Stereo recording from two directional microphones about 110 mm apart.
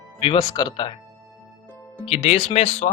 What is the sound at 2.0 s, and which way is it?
Speech, 60° left (ahead or behind).